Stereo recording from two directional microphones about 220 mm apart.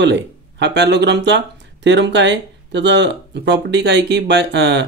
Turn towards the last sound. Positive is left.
turn(degrees=-50)  # may be behind; listen again after turning